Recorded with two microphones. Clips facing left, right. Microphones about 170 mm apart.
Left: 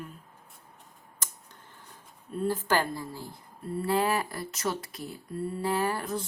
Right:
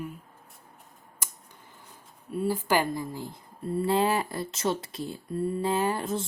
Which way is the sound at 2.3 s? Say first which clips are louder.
Right 2 dB; 10° right (ahead or behind).